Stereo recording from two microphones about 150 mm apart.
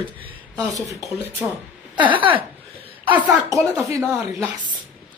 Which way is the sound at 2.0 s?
35° right (ahead or behind).